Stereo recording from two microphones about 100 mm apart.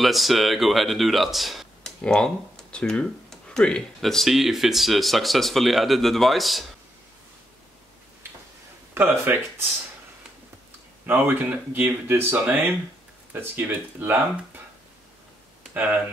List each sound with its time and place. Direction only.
0.0 s speech: centre (ahead or behind)
8.9 s speech: 25° right (ahead or behind)
11.1 s speech: 20° right (ahead or behind)
15.7 s speech: 15° right (ahead or behind)